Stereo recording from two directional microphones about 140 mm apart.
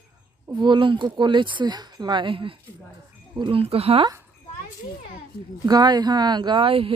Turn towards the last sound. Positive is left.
turn(degrees=-40)  # may be behind; listen again after turning